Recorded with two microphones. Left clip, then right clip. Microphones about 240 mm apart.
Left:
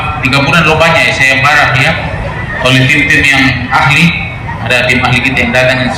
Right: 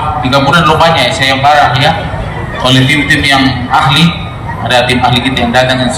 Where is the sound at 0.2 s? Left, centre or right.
Right.